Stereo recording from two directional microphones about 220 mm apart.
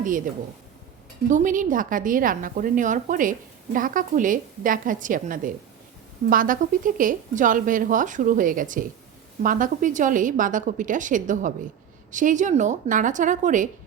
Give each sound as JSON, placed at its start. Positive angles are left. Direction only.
{"t": 1.3, "sound": "a woman's voice", "side_deg": -35}